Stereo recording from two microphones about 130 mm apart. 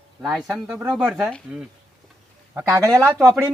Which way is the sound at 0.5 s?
15° right (ahead or behind).